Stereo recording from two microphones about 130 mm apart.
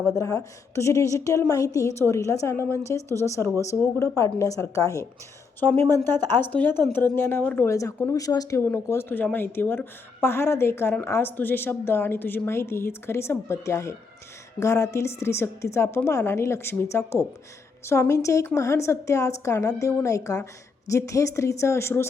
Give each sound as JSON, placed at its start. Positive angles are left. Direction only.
{"t": 0.1, "sound": "speech", "side_deg": 25}
{"t": 5.5, "sound": "speech", "side_deg": 15}